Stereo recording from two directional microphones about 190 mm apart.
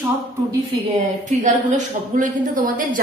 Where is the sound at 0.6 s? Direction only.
35° right (ahead or behind).